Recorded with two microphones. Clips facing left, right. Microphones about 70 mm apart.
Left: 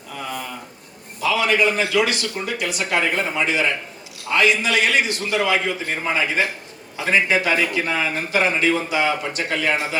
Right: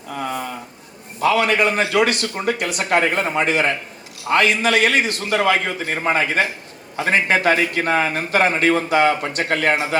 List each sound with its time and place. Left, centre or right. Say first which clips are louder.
0.1 s a man's voice: right 4 dB; right